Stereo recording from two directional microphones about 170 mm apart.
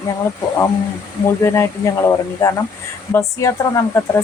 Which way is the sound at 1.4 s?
15° left (ahead or behind).